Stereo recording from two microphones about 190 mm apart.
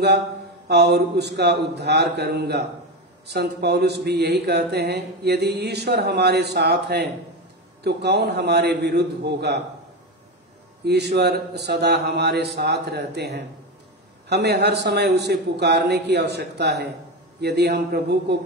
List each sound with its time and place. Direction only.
0.7 s speech: 60° right (ahead or behind)
10.9 s speech: 60° right (ahead or behind)